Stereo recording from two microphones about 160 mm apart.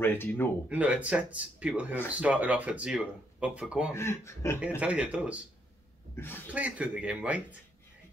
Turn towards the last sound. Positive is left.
turn(degrees=-10)  # may be behind; listen again after turning